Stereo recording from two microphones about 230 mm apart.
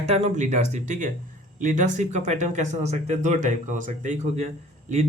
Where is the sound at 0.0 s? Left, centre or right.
Right.